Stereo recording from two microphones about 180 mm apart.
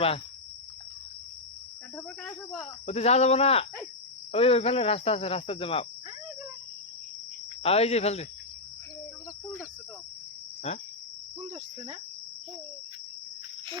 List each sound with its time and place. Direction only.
2.8 s cricket: 35° left (ahead or behind)
7.6 s cricket: 35° left (ahead or behind)